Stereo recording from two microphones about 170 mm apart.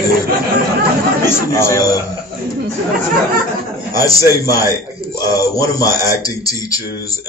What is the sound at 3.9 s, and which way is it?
Speech, 20° left (ahead or behind).